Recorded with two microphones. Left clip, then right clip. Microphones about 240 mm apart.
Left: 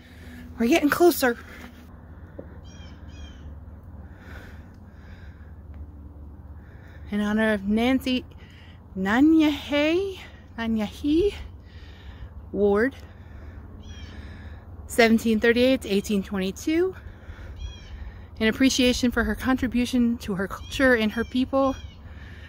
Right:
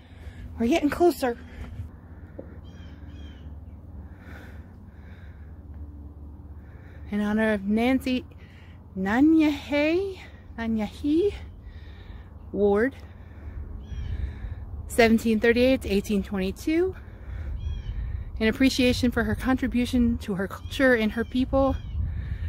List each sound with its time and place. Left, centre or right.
0.3 s speech: centre
7.1 s speech: centre
12.5 s speech: centre
14.1 s a sound: centre
15.0 s speech: centre
18.4 s speech: centre